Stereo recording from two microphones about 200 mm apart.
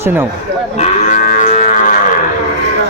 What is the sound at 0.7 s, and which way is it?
Moo, 45° left (ahead or behind).